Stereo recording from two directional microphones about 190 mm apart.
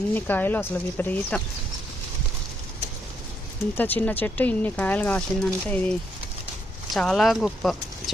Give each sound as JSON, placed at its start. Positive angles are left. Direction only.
{"t": 0.1, "sound": "speech", "side_deg": 10}
{"t": 3.8, "sound": "speech", "side_deg": 10}